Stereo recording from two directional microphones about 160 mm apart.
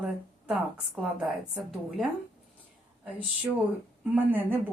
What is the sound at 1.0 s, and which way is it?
Speech, centre (ahead or behind).